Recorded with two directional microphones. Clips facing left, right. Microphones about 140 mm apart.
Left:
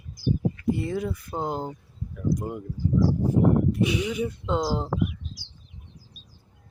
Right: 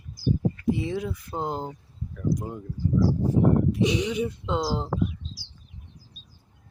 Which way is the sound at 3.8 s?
30° right (ahead or behind).